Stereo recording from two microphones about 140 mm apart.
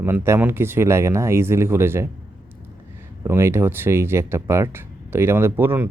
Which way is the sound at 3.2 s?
20° right (ahead or behind).